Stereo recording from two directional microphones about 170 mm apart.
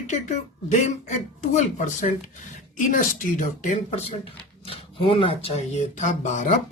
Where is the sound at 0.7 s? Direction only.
45° left (ahead or behind).